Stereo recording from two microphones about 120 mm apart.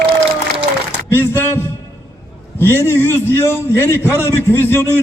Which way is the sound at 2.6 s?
20° left (ahead or behind).